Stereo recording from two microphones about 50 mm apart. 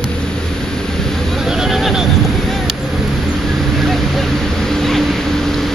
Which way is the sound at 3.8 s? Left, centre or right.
Centre.